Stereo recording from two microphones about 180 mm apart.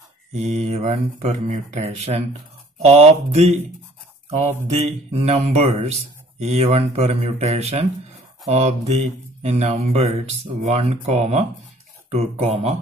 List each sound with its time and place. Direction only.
0.3 s speech: 40° right (ahead or behind)